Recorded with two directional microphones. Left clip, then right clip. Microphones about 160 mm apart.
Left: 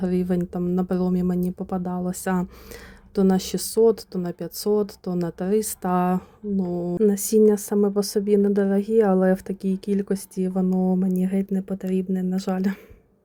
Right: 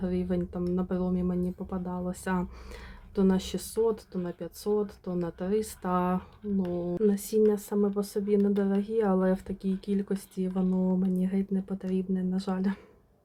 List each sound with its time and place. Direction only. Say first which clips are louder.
0.0 s speech: left 6 dB; 40° left (ahead or behind); by 12.8 s 25° left (ahead or behind)